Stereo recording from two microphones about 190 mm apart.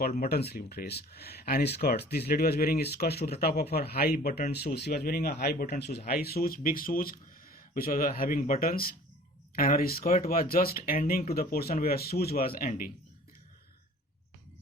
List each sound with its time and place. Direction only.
0.2 s speech: 55° left (ahead or behind)